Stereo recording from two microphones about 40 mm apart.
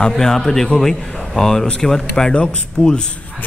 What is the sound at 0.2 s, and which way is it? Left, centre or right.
Speech, centre.